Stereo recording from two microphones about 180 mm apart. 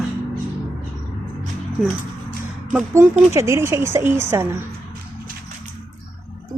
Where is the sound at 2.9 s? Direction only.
15° right (ahead or behind).